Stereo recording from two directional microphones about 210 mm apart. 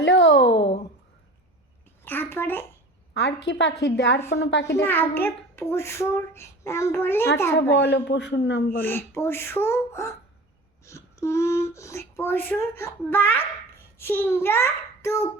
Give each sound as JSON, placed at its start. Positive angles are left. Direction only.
{"t": 0.0, "sound": "a sound", "side_deg": 60}
{"t": 2.0, "sound": "a sound", "side_deg": 10}
{"t": 3.2, "sound": "a man's voice", "side_deg": 55}
{"t": 4.6, "sound": "a child's voice", "side_deg": 10}
{"t": 7.7, "sound": "a man's voice", "side_deg": 55}
{"t": 8.8, "sound": "a child's voice", "side_deg": 10}